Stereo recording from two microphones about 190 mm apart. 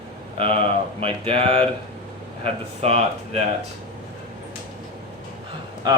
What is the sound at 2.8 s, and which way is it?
Mantra, 35° right (ahead or behind).